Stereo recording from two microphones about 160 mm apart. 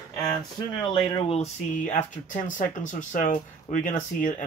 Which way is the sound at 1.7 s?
50° left (ahead or behind).